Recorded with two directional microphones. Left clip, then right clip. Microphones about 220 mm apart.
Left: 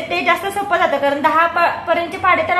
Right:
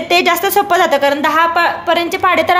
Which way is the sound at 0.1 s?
50° right (ahead or behind).